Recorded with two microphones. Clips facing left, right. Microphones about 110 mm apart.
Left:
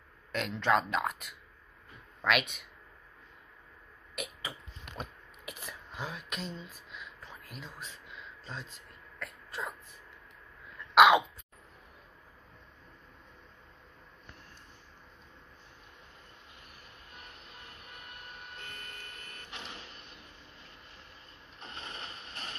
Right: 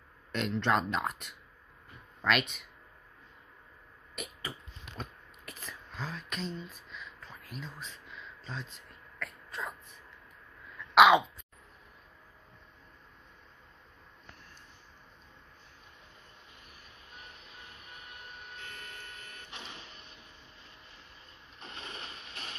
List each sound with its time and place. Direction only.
0.3 s speech: centre (ahead or behind)
4.1 s a sound: 5° left (ahead or behind)
9.2 s throat clearing: 5° left (ahead or behind)
11.0 s throat clearing: centre (ahead or behind)
17.6 s printer: 55° left (ahead or behind)
21.6 s a sound: 35° left (ahead or behind)